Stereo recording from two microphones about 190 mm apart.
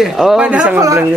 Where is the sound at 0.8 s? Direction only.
15° right (ahead or behind).